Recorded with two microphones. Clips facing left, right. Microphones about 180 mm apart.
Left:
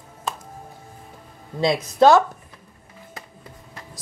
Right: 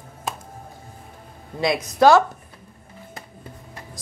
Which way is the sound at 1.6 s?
25° left (ahead or behind).